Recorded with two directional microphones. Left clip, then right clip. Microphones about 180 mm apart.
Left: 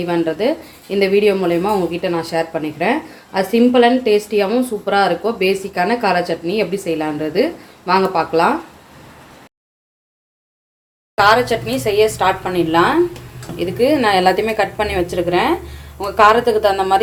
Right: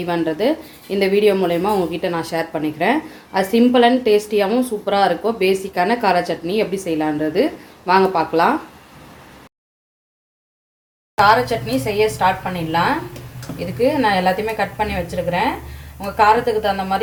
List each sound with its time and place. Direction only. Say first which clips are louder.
0.0 s speech: left 2 dB; 5° right (ahead or behind)
11.2 s a woman's voice: left 1 dB; 45° left (ahead or behind)
13.7 s a woman's voice: left 3 dB; 50° left (ahead or behind)